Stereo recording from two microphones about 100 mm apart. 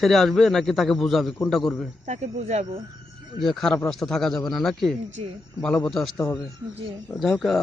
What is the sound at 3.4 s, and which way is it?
Speech, 5° left (ahead or behind).